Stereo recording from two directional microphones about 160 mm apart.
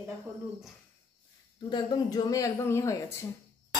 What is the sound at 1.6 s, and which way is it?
Speech, 25° left (ahead or behind).